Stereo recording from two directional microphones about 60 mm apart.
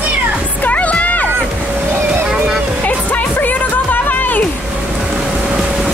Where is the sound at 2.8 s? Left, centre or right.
Left.